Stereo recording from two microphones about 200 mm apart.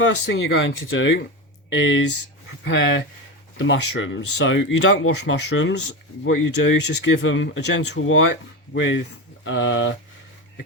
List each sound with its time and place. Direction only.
0.3 s speech: 60° left (ahead or behind); by 9.9 s 75° left (ahead or behind)